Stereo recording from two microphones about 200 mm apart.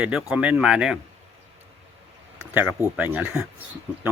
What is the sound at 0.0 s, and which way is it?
Speech, 5° right (ahead or behind).